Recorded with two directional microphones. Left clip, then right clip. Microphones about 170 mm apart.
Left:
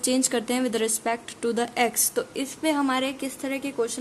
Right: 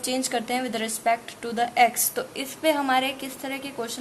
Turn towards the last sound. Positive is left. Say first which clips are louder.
# left 4 dB
turn(degrees=30)  # may be behind; listen again after turning